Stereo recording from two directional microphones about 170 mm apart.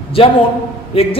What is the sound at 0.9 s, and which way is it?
Speech, 35° left (ahead or behind).